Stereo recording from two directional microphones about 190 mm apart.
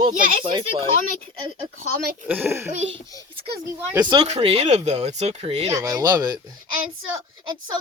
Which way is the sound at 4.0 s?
25° right (ahead or behind).